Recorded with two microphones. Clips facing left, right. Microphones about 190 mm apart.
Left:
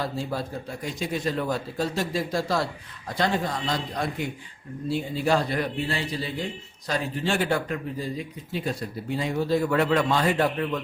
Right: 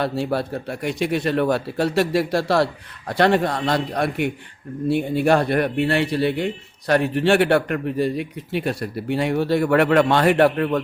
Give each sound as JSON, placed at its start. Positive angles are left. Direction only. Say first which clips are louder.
{"t": 0.0, "sound": "a man's voice", "louder": "right 7 dB", "side_deg": -70}